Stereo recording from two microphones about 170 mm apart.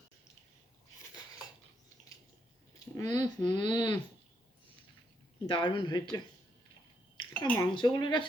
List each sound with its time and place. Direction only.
3.0 s speech: 20° left (ahead or behind)
5.5 s speech: 30° left (ahead or behind)
7.3 s speech: 10° left (ahead or behind)
7.8 s speech: 25° left (ahead or behind)